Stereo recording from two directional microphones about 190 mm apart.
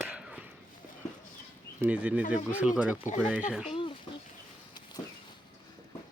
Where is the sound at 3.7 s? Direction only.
25° left (ahead or behind).